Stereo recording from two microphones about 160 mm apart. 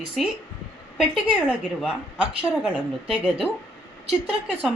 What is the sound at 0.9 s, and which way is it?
Speech, 5° right (ahead or behind).